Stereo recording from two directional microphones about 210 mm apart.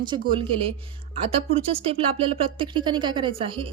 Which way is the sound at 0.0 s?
20° right (ahead or behind).